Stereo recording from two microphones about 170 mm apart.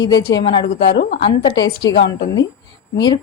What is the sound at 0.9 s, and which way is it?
Speech, 70° left (ahead or behind).